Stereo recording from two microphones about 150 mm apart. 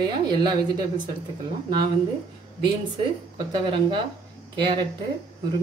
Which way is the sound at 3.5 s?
30° right (ahead or behind).